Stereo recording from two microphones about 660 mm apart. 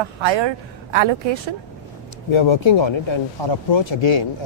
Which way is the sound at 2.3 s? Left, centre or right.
Left.